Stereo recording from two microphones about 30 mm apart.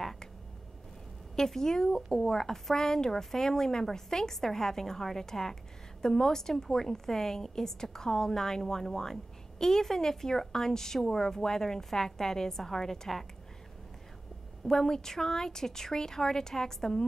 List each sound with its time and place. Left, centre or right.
1.3 s a woman's voice: centre
14.7 s a woman's voice: centre